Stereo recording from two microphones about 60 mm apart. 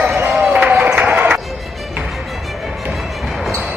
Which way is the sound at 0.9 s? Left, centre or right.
Right.